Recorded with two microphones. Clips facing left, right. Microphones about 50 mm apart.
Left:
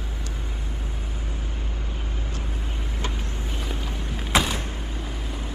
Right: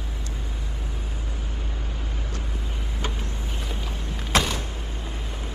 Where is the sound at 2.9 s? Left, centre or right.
Left.